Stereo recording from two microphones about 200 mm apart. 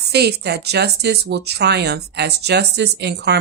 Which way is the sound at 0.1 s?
55° right (ahead or behind).